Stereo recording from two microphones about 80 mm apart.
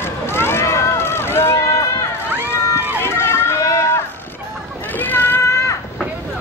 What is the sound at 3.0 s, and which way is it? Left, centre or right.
Run, left.